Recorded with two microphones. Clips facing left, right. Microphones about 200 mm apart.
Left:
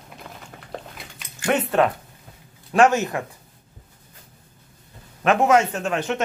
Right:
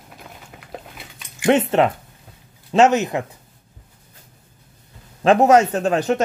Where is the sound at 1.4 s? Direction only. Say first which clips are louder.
Right 4 dB; 25° right (ahead or behind).